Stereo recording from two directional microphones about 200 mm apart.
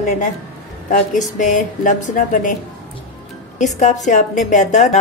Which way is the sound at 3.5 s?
35° left (ahead or behind).